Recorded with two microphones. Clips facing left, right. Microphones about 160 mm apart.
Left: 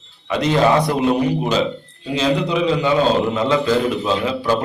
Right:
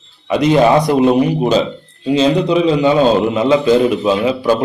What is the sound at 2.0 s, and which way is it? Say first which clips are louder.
A man's voice: right 6 dB; 20° right (ahead or behind).